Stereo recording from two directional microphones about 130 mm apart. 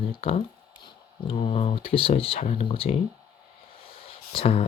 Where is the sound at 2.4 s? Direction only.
65° left (ahead or behind).